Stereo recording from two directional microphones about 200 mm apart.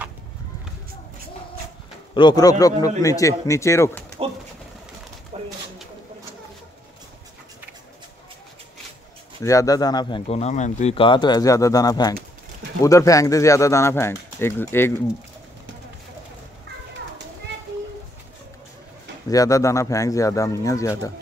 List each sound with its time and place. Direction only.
2.1 s speech: 20° left (ahead or behind)
5.3 s a sound: 35° right (ahead or behind)
9.4 s speech: 15° left (ahead or behind)
19.2 s speech: 15° left (ahead or behind)